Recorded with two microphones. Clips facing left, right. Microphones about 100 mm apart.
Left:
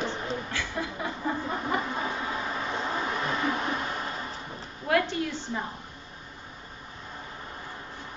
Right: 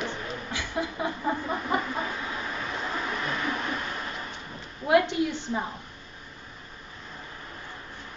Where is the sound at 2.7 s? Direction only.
25° left (ahead or behind).